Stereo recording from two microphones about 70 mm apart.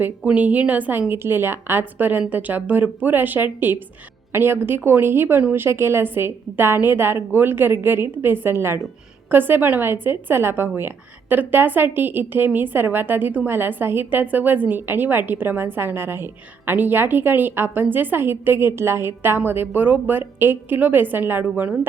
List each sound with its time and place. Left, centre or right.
0.2 s a woman's voice: centre